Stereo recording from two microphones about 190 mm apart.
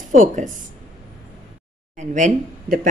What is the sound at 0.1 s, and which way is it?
Speech, 45° right (ahead or behind).